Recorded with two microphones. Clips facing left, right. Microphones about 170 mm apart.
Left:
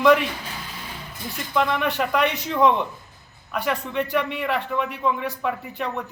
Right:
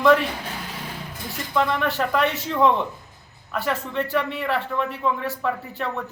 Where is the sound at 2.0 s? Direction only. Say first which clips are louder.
Even; 15° left (ahead or behind).